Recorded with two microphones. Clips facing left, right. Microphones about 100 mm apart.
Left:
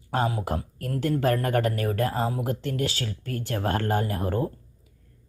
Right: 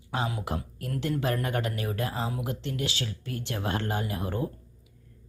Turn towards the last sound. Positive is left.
turn(degrees=45)  # may be behind; listen again after turning